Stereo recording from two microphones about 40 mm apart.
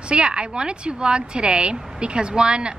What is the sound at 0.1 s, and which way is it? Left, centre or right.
A woman's voice, right.